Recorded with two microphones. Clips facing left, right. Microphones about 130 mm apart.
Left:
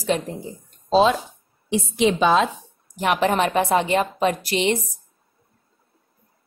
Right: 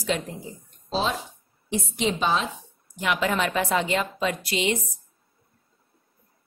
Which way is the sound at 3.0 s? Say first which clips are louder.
Left 5 dB; 40° left (ahead or behind).